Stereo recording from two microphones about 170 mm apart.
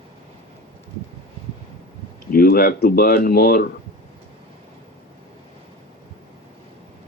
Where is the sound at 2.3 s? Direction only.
60° left (ahead or behind).